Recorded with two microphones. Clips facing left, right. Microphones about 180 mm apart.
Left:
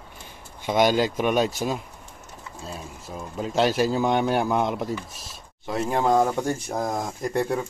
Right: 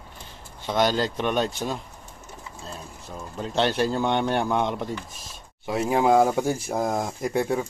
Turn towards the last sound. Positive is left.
turn(degrees=0)  # may be behind; listen again after turning